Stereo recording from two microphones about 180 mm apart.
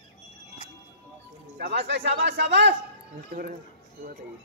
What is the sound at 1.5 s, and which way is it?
A man's voice, 65° right (ahead or behind).